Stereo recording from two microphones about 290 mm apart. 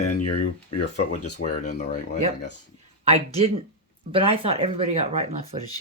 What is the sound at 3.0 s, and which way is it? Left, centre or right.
Speech, right.